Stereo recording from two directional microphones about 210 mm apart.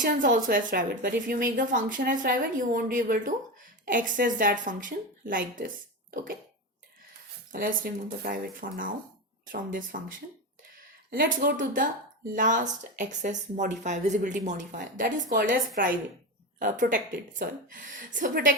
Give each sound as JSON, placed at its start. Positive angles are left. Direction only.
{"t": 0.0, "sound": "speech", "side_deg": -40}
{"t": 7.5, "sound": "speech", "side_deg": -45}
{"t": 11.4, "sound": "speech", "side_deg": -40}